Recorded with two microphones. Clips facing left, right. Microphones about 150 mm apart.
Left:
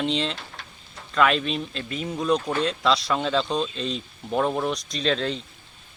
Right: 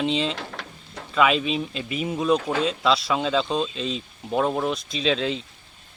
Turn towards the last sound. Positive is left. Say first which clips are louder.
# right 1 dB
turn(degrees=0)  # may be behind; listen again after turning